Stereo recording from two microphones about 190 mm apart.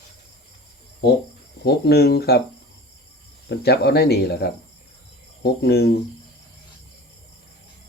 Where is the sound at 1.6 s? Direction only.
60° left (ahead or behind).